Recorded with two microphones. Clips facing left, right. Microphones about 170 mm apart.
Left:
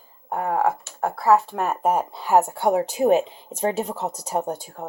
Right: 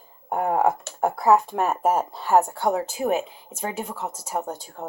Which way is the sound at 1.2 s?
15° right (ahead or behind).